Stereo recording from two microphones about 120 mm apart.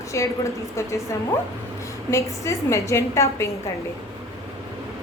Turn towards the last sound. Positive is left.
turn(degrees=25)  # may be behind; listen again after turning